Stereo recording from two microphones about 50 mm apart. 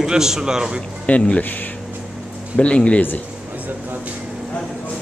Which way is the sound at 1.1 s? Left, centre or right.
Left.